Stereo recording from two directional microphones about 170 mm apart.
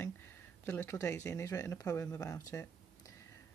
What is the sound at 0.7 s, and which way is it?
Speech, 15° left (ahead or behind).